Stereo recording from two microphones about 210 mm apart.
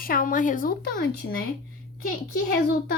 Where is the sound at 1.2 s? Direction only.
60° left (ahead or behind).